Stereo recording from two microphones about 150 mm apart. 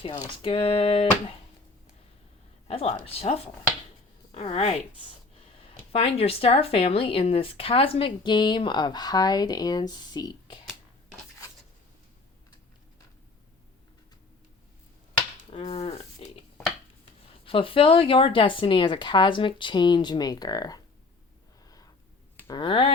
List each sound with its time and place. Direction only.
0.0 s speech: 35° left (ahead or behind)
2.6 s speech: 40° left (ahead or behind)
15.4 s a sound: 40° left (ahead or behind)
17.4 s speech: 35° left (ahead or behind)
21.7 s a sound: 25° left (ahead or behind)
22.5 s speech: 35° left (ahead or behind)